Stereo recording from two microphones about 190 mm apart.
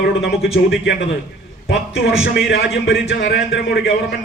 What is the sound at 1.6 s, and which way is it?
A man's voice, 60° left (ahead or behind).